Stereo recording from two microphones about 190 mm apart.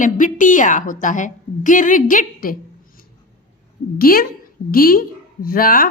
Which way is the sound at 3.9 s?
50° left (ahead or behind).